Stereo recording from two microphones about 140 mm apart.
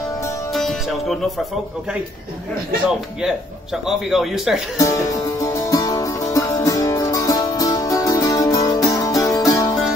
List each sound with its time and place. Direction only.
0.5 s speech: centre (ahead or behind)
2.9 s speech: 5° right (ahead or behind)
4.7 s music: 25° left (ahead or behind)